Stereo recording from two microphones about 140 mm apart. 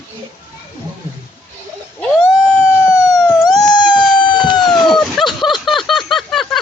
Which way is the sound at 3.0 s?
25° left (ahead or behind).